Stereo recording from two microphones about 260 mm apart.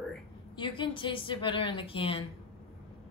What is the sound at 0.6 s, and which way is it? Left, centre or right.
A woman's voice, centre.